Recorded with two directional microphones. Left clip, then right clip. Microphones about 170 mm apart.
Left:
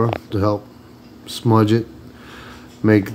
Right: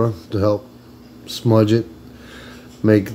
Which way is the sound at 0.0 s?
10° left (ahead or behind).